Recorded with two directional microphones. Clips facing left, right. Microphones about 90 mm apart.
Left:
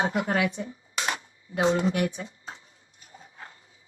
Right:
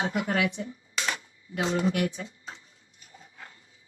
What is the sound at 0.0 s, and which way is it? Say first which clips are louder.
Speech: left 2 dB; 35° left (ahead or behind).